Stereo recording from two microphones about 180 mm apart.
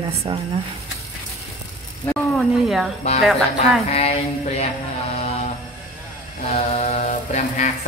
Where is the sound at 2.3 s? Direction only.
Centre (ahead or behind).